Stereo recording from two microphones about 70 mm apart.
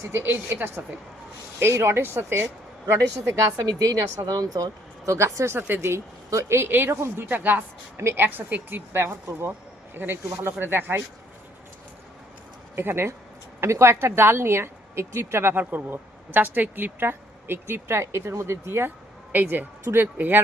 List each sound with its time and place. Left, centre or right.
0.0 s speech: right
3.0 s a woman's voice: right
3.7 s a woman's voice: right
5.1 s a woman's voice: right
5.5 s speech: right
12.7 s speech: right
15.5 s speech: right
19.3 s a woman's voice: right
20.1 s a woman's voice: right